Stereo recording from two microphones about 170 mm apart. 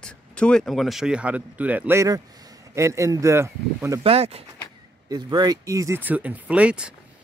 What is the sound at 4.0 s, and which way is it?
Speech, 35° right (ahead or behind).